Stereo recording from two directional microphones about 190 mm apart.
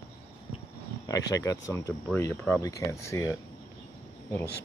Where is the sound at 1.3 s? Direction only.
15° left (ahead or behind).